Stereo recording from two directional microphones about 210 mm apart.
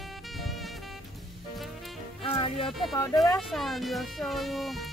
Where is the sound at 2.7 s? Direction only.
Centre (ahead or behind).